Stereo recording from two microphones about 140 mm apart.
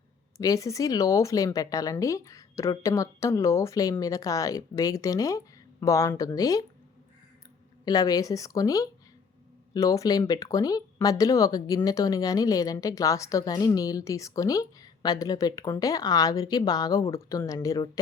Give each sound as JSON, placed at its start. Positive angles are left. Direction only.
{"t": 0.3, "sound": "a woman's voice", "side_deg": 25}
{"t": 7.9, "sound": "a woman's voice", "side_deg": 25}